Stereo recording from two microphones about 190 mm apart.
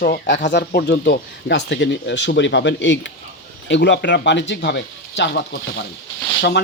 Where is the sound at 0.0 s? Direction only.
50° left (ahead or behind).